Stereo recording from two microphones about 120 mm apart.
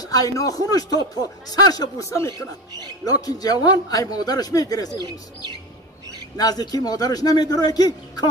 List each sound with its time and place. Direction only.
0.0 s a man's voice: 30° left (ahead or behind)
6.3 s a man's voice: 35° left (ahead or behind)